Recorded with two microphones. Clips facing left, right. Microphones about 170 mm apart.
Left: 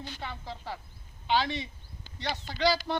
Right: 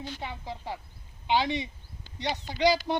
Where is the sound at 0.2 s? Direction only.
15° right (ahead or behind).